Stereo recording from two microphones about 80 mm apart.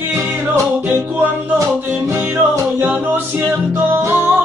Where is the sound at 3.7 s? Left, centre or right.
Right.